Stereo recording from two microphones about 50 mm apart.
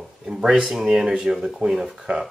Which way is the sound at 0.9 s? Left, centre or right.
Centre.